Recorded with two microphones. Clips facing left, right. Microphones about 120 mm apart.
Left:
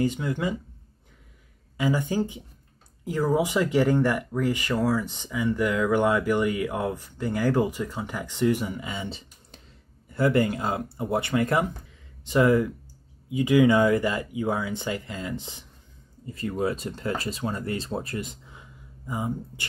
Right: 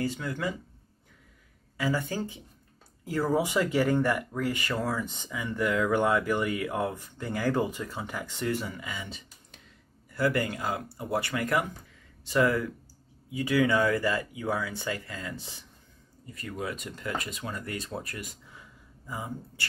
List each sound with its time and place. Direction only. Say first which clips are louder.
0.0 s speech: left 5 dB; 20° left (ahead or behind)
1.8 s speech: left 5 dB; 15° left (ahead or behind)